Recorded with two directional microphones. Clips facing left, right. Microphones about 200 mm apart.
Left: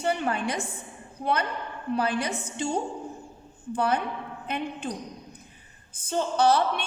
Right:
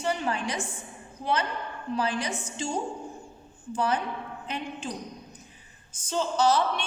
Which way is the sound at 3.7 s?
60° left (ahead or behind).